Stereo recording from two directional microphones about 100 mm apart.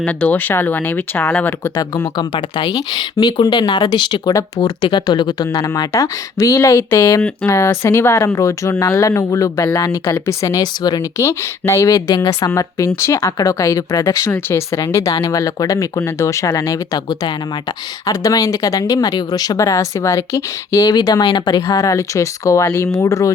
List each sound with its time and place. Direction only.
0.0 s speech: 15° left (ahead or behind)
1.7 s speech: 40° left (ahead or behind)
4.4 s speech: 35° left (ahead or behind)
4.8 s speech: 50° left (ahead or behind); by 12.0 s 30° left (ahead or behind)
12.0 s speech: 50° left (ahead or behind)
12.4 s speech: 30° left (ahead or behind)
14.3 s speech: 15° left (ahead or behind)
14.7 s speech: 30° left (ahead or behind)
21.1 s speech: 45° left (ahead or behind)
21.7 s speech: 35° left (ahead or behind)